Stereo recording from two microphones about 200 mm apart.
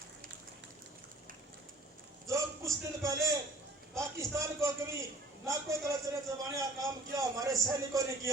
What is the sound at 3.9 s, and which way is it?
A man's voice, 15° right (ahead or behind).